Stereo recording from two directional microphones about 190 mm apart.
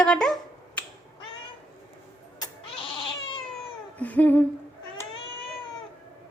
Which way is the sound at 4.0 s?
10° left (ahead or behind).